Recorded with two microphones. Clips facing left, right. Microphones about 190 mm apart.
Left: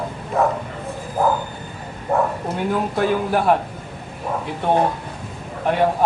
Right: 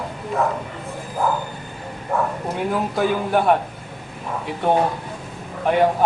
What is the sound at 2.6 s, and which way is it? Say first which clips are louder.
Speech: even; centre (ahead or behind).